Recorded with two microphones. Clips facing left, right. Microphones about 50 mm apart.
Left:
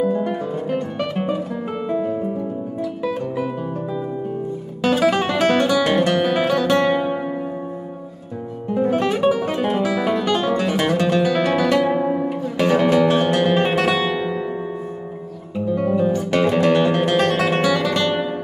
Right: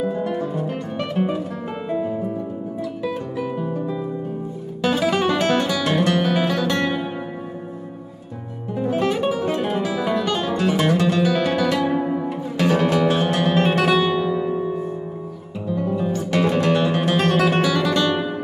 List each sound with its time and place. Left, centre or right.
0.1 s music: centre
3.0 s guitar: centre
4.8 s music: centre
8.7 s music: centre
10.7 s music: centre
11.0 s guitar: centre
11.8 s music: centre
13.1 s music: centre
15.7 s music: centre
16.9 s music: centre